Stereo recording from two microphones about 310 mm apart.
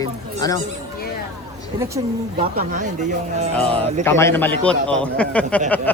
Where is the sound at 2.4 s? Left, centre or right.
Right.